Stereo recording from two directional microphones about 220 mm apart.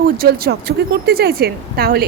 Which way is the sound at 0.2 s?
45° right (ahead or behind).